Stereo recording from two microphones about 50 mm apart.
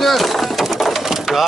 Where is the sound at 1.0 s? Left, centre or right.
Centre.